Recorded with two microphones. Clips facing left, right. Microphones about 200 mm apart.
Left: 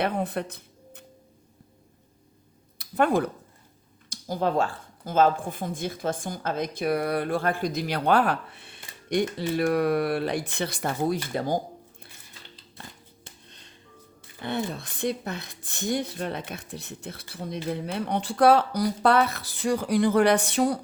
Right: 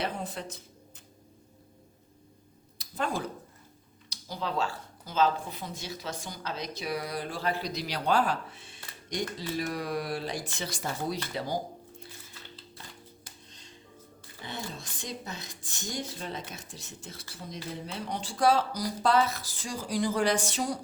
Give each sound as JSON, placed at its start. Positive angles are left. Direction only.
{"t": 0.0, "sound": "speech", "side_deg": 60}
{"t": 2.7, "sound": "a sound", "side_deg": 60}
{"t": 4.1, "sound": "speech", "side_deg": 50}
{"t": 11.3, "sound": "a sound", "side_deg": 50}
{"t": 13.5, "sound": "music", "side_deg": 60}
{"t": 14.4, "sound": "speech", "side_deg": 60}